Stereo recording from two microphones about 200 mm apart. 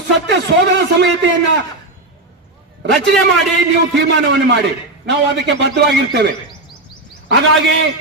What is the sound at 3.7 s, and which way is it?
Speech, 60° right (ahead or behind).